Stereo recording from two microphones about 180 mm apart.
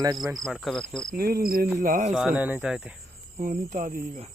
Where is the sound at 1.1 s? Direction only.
55° right (ahead or behind).